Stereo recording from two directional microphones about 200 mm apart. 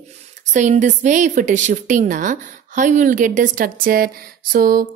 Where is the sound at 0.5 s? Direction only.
40° right (ahead or behind).